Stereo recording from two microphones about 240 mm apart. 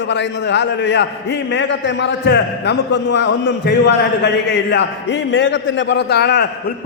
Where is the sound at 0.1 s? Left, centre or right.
Left.